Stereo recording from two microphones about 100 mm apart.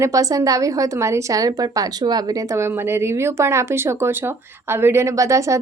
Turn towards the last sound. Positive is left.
turn(degrees=-30)  # may be behind; listen again after turning